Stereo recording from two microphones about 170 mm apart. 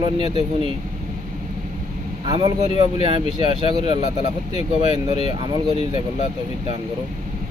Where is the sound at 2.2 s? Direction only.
35° right (ahead or behind).